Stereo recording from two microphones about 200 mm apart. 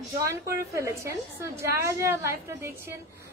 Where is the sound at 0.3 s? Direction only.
15° right (ahead or behind).